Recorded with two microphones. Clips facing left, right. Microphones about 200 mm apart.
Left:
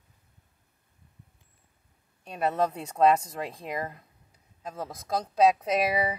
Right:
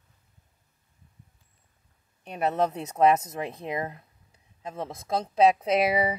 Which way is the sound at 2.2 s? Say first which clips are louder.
Right 1 dB; 20° right (ahead or behind).